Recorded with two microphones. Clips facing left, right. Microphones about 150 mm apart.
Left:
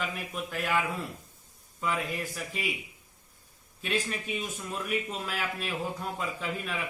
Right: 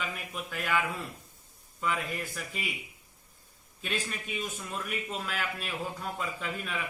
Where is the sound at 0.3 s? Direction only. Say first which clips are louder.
Left 1 dB; 5° left (ahead or behind).